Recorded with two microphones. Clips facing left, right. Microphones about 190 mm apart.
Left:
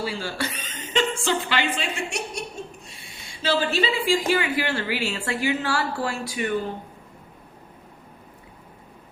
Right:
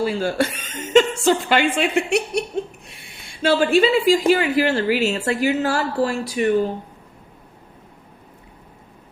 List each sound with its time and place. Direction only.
0.0 s a woman's voice: 45° right (ahead or behind)